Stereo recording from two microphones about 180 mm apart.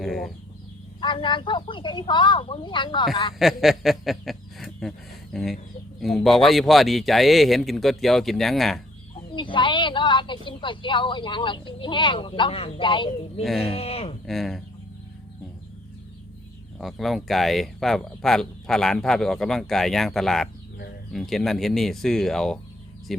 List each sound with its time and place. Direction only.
0.0 s speech: centre (ahead or behind)
1.0 s a woman's voice: 25° left (ahead or behind)
3.3 s chuckle: centre (ahead or behind)
6.0 s speech: centre (ahead or behind)
9.3 s a woman's voice: 25° left (ahead or behind)
13.4 s speech: centre (ahead or behind)
13.7 s speech: 35° left (ahead or behind)
14.3 s speech: centre (ahead or behind)
16.7 s speech: centre (ahead or behind)